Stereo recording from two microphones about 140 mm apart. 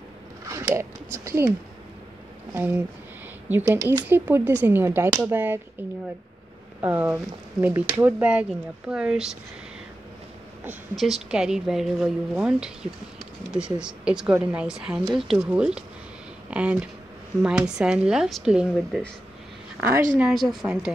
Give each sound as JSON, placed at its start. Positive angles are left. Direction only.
{"t": 0.5, "sound": "speech", "side_deg": -20}
{"t": 2.5, "sound": "speech", "side_deg": -15}
{"t": 6.8, "sound": "speech", "side_deg": -15}
{"t": 11.2, "sound": "speech", "side_deg": -5}
{"t": 19.8, "sound": "speech", "side_deg": -15}
{"t": 20.2, "sound": "speech", "side_deg": 0}